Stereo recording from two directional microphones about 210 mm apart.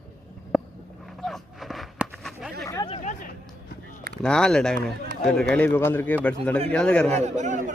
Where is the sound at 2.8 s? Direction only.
25° left (ahead or behind).